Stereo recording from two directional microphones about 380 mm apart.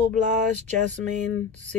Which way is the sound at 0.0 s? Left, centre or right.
Centre.